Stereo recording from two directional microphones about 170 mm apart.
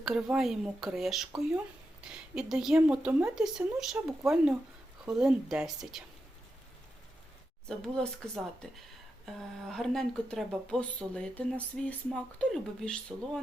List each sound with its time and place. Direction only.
0.0 s speech: 5° right (ahead or behind)
7.7 s speech: 5° left (ahead or behind)